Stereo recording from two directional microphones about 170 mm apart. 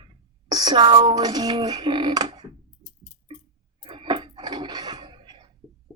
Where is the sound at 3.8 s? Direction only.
30° right (ahead or behind).